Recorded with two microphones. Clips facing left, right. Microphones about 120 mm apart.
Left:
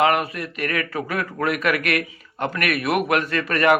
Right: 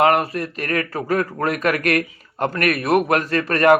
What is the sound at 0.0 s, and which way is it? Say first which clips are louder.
Speech: right 3 dB; 40° right (ahead or behind).